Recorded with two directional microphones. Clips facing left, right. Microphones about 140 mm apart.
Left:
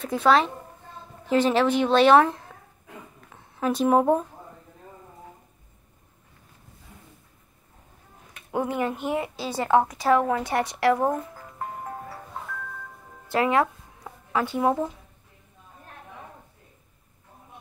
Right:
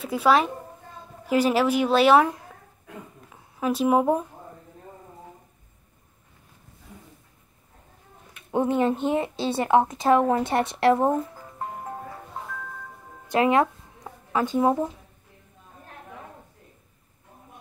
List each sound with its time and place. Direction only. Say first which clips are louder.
0.0 s a woman's voice: even; 10° right (ahead or behind)
8.5 s a woman's voice: right 4 dB; 25° right (ahead or behind)
13.3 s music: right 2 dB; 20° right (ahead or behind)